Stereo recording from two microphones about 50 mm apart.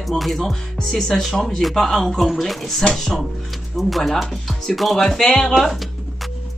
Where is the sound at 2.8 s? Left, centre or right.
Centre.